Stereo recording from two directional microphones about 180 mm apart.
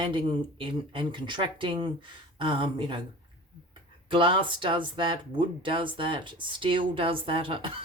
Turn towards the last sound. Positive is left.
turn(degrees=-30)  # may be behind; listen again after turning